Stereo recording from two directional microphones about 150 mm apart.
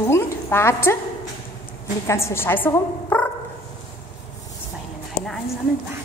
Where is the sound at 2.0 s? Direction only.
20° left (ahead or behind).